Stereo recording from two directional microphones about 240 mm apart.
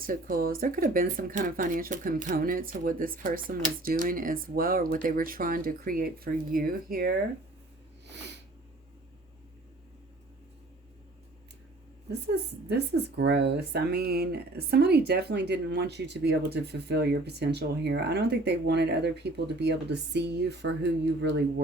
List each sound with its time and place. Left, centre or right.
0.0 s speech: right
8.0 s sniff: right
12.2 s speech: right